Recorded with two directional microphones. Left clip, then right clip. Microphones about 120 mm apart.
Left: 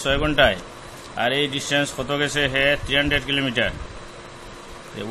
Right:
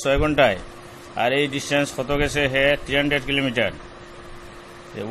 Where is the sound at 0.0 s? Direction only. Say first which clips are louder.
Even; 40° right (ahead or behind).